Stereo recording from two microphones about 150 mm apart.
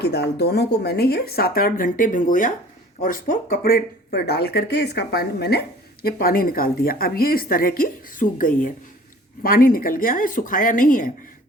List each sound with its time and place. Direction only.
0.0 s speech: 90° left; by 8.7 s 65° left (ahead or behind)
9.4 s speech: 75° left (ahead or behind)